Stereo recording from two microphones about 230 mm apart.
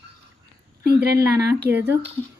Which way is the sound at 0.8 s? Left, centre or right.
Right.